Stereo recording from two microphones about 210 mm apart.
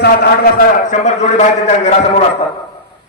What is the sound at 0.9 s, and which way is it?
A man's voice, 35° left (ahead or behind).